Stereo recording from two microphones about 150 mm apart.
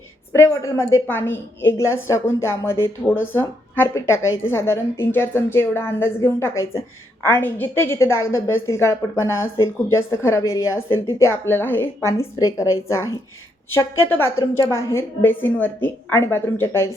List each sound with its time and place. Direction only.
0.3 s a woman's voice: 20° left (ahead or behind)